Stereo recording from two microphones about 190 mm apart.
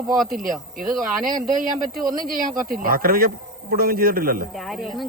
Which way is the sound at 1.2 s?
45° right (ahead or behind).